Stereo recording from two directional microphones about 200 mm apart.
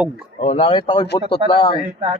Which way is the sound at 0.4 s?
30° left (ahead or behind).